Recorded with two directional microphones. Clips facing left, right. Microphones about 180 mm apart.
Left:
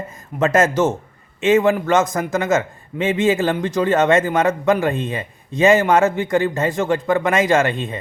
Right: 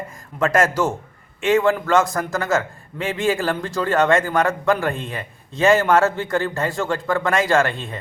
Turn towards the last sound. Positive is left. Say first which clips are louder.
# left 2 dB
turn(degrees=20)  # may be behind; listen again after turning